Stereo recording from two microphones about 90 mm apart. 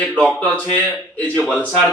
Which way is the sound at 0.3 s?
15° left (ahead or behind).